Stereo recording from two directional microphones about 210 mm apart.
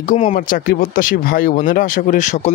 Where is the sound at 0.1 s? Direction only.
35° left (ahead or behind).